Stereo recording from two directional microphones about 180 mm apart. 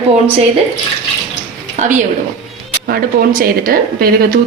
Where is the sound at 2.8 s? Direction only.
55° right (ahead or behind).